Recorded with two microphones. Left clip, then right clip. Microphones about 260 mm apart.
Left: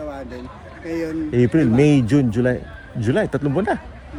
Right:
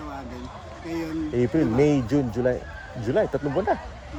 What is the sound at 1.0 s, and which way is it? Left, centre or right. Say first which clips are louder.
Speech: left 6 dB; left.